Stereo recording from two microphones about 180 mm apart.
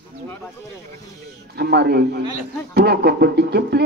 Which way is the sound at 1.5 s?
65° right (ahead or behind).